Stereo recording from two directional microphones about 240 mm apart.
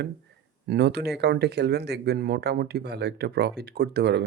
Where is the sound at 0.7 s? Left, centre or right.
Right.